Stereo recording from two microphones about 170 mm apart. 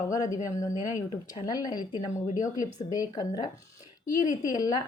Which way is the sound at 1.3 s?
25° left (ahead or behind).